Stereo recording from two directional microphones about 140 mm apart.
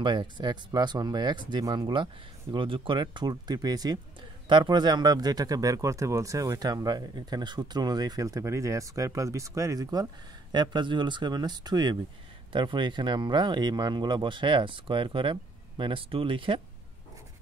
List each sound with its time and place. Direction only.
0.0 s speech: 35° right (ahead or behind)